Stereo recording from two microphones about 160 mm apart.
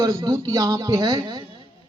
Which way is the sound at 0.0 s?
20° right (ahead or behind).